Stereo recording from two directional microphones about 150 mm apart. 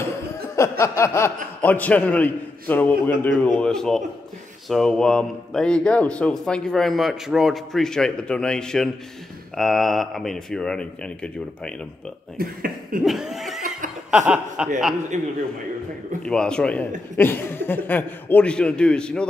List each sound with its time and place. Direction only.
0.6 s a man's voice: 20° left (ahead or behind)
12.4 s cough: 75° right (ahead or behind)
13.0 s neigh: centre (ahead or behind)
14.1 s speech: 5° right (ahead or behind)
15.1 s a man's voice: 50° right (ahead or behind)
16.2 s a man's voice: 5° left (ahead or behind)